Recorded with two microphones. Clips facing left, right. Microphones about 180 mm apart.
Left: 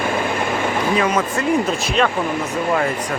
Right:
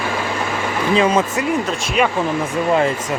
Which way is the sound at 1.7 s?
10° right (ahead or behind).